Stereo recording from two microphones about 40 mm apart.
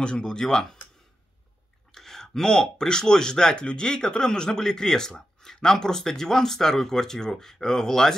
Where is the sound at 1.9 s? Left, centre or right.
Centre.